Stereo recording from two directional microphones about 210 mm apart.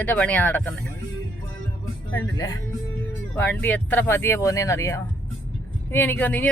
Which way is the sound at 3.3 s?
10° left (ahead or behind).